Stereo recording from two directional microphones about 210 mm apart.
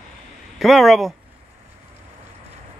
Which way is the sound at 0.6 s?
Centre (ahead or behind).